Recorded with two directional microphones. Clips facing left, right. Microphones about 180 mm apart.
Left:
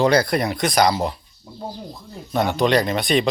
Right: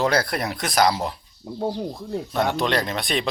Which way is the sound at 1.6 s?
75° right (ahead or behind).